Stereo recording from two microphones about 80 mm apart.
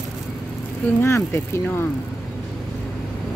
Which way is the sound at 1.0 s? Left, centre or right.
Left.